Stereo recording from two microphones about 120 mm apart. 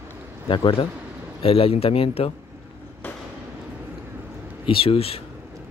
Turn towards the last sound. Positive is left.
turn(degrees=55)  # may be behind; listen again after turning